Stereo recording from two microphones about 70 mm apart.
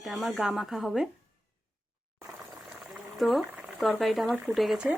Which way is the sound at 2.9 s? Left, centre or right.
Centre.